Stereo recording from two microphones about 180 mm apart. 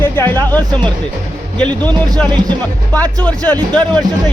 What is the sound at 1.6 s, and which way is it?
Speech, 5° left (ahead or behind).